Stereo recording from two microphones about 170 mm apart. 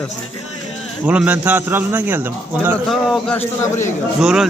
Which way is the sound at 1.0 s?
10° right (ahead or behind).